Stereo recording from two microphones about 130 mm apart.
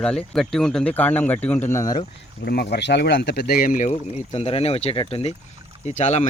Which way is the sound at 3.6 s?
75° left (ahead or behind).